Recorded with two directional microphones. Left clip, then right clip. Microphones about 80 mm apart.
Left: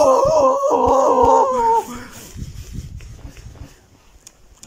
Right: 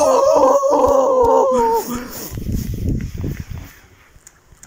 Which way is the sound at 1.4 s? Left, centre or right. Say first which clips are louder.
Right 1 dB; right.